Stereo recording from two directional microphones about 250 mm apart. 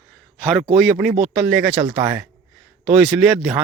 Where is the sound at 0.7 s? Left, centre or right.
Centre.